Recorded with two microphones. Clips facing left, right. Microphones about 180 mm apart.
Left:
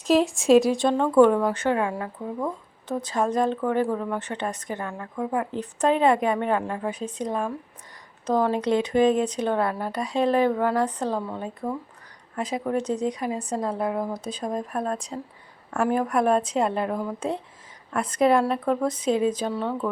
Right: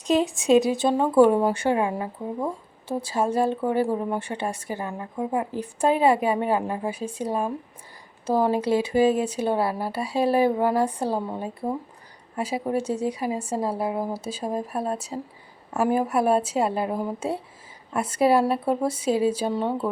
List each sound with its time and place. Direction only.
0.0 s speech: centre (ahead or behind)
4.9 s speech: 20° right (ahead or behind)
5.5 s speech: 10° right (ahead or behind)